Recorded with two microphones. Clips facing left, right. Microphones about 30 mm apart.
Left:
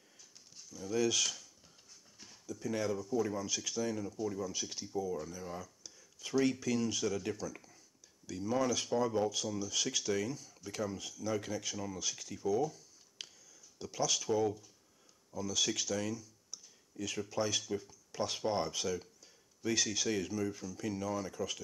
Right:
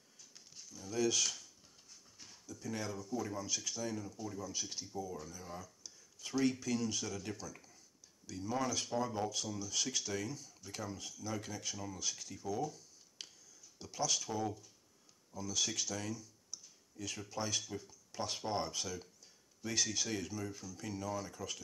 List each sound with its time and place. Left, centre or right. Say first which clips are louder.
0.6 s a sound: left 6 dB; centre
0.9 s speech: left 2 dB; centre
2.4 s speech: left 6 dB; centre
3.3 s speech: left 3 dB; centre
4.6 s speech: left 5 dB; centre
7.4 s speech: left 6 dB; centre
8.8 s speech: left 5 dB; centre
17.5 s speech: left 4 dB; centre
21.4 s speech: left 6 dB; left